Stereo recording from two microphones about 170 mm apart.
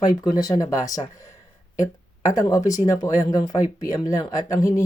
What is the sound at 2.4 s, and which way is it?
Speech, 20° left (ahead or behind).